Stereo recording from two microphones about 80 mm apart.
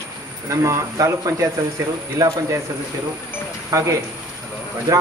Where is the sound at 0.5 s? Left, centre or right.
Right.